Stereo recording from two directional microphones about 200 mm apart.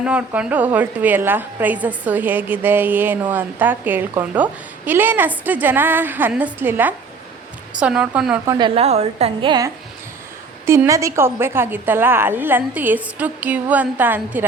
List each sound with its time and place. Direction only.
0.0 s a woman's voice: 5° right (ahead or behind)
8.5 s a woman's voice: 25° right (ahead or behind); by 14.4 s 10° right (ahead or behind)